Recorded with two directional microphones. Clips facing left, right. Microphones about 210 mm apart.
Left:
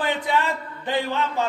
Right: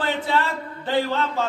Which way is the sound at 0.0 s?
15° left (ahead or behind).